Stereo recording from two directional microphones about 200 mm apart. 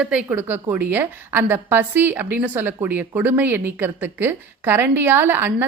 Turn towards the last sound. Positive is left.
turn(degrees=-10)  # may be behind; listen again after turning